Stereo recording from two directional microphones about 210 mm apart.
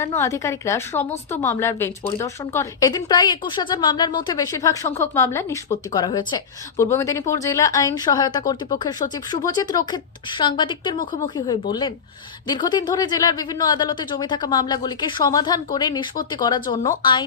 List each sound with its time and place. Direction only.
0.0 s a woman's voice: 10° left (ahead or behind)